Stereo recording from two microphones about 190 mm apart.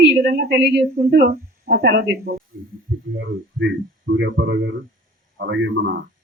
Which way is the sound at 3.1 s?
75° right (ahead or behind).